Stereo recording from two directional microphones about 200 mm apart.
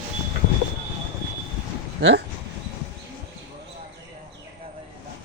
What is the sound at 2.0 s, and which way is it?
Speech, 65° right (ahead or behind).